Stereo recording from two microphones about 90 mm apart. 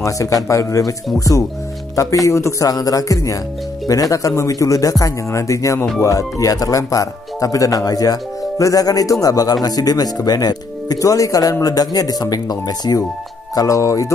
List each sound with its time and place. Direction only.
0.0 s speech: 35° left (ahead or behind)